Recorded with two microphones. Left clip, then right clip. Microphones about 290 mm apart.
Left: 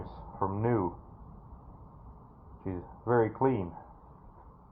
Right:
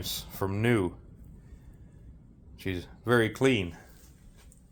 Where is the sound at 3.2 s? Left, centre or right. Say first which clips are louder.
Right 2 dB; right.